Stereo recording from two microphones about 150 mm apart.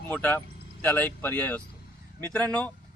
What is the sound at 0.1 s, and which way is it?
A man's voice, 10° left (ahead or behind).